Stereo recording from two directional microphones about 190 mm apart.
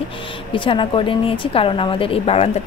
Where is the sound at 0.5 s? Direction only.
25° left (ahead or behind).